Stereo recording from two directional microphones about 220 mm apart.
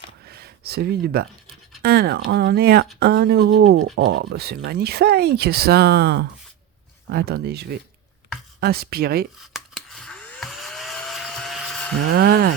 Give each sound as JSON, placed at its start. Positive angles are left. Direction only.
{"t": 0.3, "sound": "speech", "side_deg": -45}
{"t": 9.5, "sound": "a sound", "side_deg": 0}
{"t": 12.1, "sound": "speech", "side_deg": -45}